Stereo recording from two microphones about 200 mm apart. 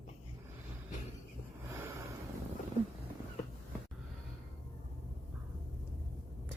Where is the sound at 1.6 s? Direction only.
15° right (ahead or behind).